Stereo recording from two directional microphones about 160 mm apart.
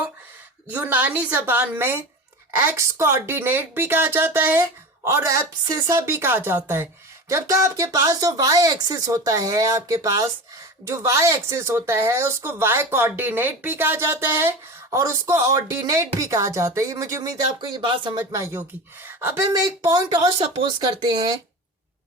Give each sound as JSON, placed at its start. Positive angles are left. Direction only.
{"t": 0.7, "sound": "speech", "side_deg": -10}